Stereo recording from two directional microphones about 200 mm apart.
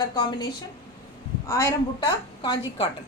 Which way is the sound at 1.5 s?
15° left (ahead or behind).